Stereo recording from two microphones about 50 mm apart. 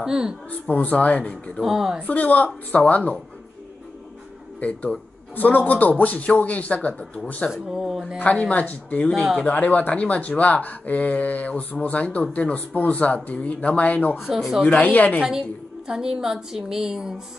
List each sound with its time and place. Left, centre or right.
0.0 s a woman's voice: centre
0.5 s speech: left
1.6 s a woman's voice: centre
2.0 s a man's voice: left
5.3 s a man's voice: left
7.5 s a woman's voice: centre
8.2 s a man's voice: left
14.1 s speech: centre
14.8 s a man's voice: left
15.9 s a woman's voice: centre